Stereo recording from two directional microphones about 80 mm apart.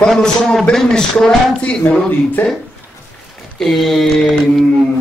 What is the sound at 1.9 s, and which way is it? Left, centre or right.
Speech, left.